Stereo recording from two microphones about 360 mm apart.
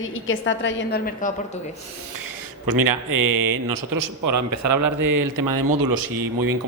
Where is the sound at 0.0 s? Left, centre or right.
Left.